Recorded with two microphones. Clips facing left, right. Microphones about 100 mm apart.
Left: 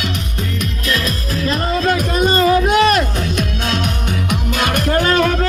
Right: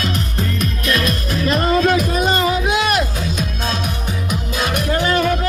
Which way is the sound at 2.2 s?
15° right (ahead or behind).